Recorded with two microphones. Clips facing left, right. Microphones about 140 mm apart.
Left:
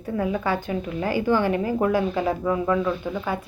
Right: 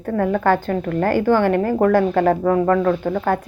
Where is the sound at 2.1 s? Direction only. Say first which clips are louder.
Right 7 dB; 60° right (ahead or behind).